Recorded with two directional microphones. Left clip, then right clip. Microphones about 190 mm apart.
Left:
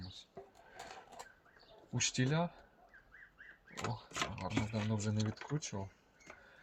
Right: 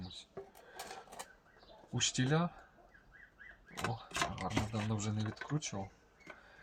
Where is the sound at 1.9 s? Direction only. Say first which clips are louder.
Right 2 dB; 20° left (ahead or behind).